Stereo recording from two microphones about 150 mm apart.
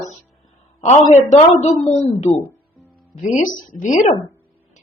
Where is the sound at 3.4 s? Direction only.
60° left (ahead or behind).